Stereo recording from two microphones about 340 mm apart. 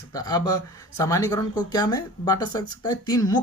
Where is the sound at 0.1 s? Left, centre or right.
Centre.